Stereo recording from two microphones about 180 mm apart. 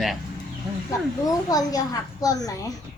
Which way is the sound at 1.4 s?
20° left (ahead or behind).